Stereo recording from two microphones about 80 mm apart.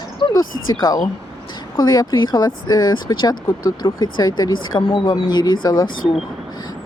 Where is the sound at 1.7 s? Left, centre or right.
Left.